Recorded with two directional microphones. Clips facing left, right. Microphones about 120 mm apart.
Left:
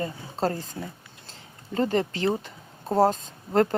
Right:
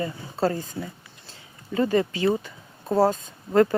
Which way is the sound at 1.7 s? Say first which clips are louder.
Right 2 dB; 35° left (ahead or behind).